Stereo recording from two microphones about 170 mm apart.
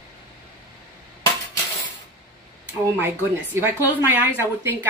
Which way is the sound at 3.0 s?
15° right (ahead or behind).